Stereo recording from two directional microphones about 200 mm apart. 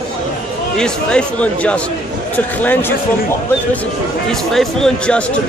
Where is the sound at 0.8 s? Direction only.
5° left (ahead or behind).